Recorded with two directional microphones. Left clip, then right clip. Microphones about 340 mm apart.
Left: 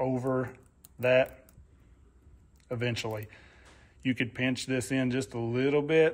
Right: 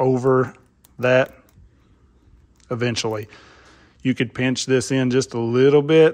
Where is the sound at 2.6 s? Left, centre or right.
Centre.